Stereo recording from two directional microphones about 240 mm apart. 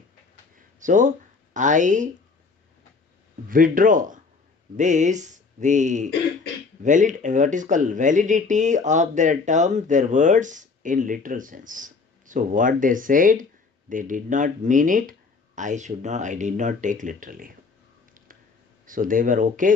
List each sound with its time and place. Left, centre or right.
0.5 s a sound: right
1.5 s speech: right
3.5 s speech: right
18.9 s speech: right